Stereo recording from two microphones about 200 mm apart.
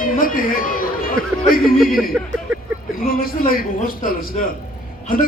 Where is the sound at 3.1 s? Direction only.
45° left (ahead or behind).